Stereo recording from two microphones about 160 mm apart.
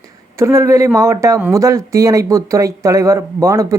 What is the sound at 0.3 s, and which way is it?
Speech, 15° right (ahead or behind).